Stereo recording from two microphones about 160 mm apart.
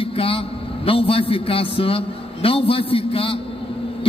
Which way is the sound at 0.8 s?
35° left (ahead or behind).